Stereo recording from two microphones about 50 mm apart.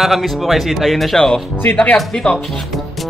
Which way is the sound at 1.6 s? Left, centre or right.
Left.